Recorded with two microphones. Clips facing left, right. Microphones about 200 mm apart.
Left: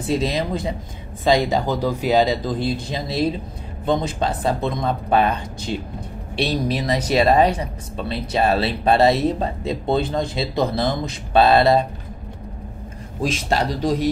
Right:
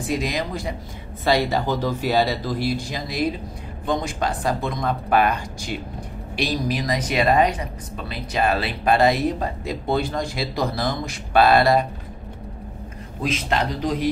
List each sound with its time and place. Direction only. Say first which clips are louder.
0.0 s speech: left 3 dB; 25° left (ahead or behind)
13.2 s speech: left 2 dB; 35° left (ahead or behind)